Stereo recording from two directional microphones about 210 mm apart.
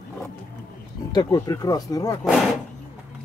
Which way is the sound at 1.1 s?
20° left (ahead or behind).